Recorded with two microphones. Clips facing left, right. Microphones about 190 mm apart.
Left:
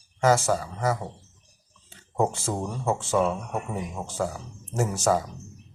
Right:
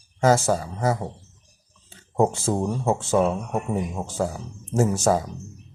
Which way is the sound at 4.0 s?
20° right (ahead or behind).